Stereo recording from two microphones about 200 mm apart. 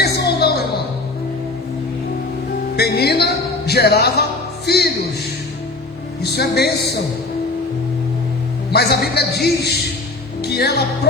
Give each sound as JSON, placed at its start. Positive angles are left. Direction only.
{"t": 0.0, "sound": "a sound", "side_deg": 55}
{"t": 2.7, "sound": "music", "side_deg": 55}
{"t": 6.2, "sound": "speech", "side_deg": 55}
{"t": 8.7, "sound": "speech", "side_deg": 55}
{"t": 10.4, "sound": "music", "side_deg": 55}